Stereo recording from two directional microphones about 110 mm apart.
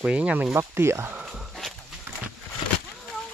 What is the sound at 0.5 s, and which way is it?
Speech, 25° right (ahead or behind).